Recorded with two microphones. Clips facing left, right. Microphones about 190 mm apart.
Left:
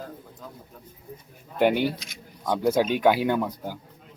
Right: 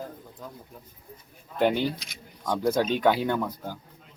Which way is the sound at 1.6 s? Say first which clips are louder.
Left 2 dB; 10° left (ahead or behind).